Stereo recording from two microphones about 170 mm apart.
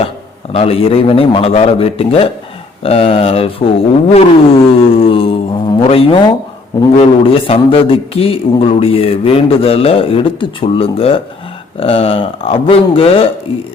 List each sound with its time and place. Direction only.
0.5 s speech: 35° left (ahead or behind)
4.1 s music: 35° left (ahead or behind)
6.9 s speech: 35° left (ahead or behind)